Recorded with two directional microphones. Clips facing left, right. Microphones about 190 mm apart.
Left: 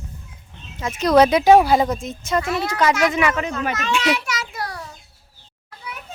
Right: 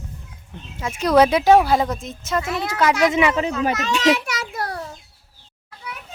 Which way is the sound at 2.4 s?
20° right (ahead or behind).